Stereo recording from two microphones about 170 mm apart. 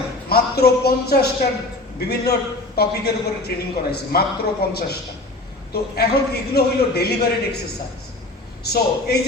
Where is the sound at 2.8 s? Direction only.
65° left (ahead or behind).